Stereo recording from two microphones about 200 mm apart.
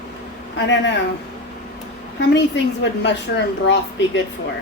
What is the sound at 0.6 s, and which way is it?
Speech, 65° left (ahead or behind).